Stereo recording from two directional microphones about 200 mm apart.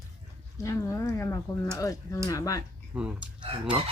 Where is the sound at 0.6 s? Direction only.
15° left (ahead or behind).